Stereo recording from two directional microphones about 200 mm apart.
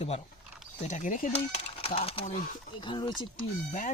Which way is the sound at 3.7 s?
40° left (ahead or behind).